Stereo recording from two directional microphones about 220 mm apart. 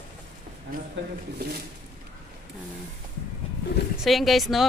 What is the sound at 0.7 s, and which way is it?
Speech, 40° right (ahead or behind).